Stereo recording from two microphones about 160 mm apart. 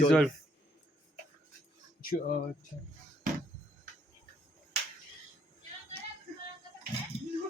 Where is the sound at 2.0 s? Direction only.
65° left (ahead or behind).